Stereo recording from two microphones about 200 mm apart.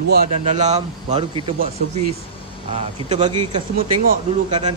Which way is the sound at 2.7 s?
35° right (ahead or behind).